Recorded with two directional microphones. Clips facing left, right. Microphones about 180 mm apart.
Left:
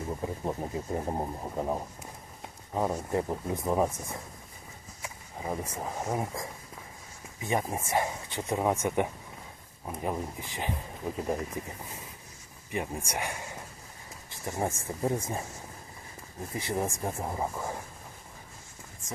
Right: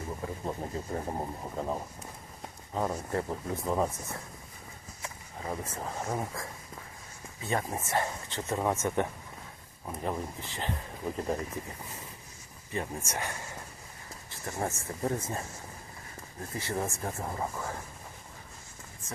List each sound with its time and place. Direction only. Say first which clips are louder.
0.2 s speech: left 3 dB; 15° left (ahead or behind)
12.7 s speech: left 2 dB; 15° left (ahead or behind)
16.6 s speech: left 2 dB; 15° left (ahead or behind)